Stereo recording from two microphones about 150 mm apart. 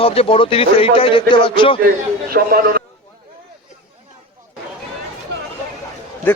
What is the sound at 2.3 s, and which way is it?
Speech, 85° right.